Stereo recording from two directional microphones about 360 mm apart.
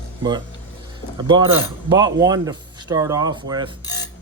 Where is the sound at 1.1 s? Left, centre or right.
Centre.